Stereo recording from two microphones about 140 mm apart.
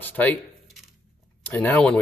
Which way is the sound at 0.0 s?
10° left (ahead or behind).